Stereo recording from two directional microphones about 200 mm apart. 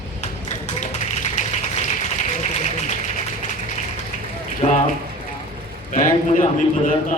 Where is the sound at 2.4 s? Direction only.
35° left (ahead or behind).